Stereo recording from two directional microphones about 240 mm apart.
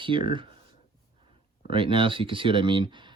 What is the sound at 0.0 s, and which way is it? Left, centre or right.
Speech, right.